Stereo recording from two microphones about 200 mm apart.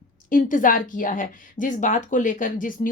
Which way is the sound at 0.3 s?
40° left (ahead or behind).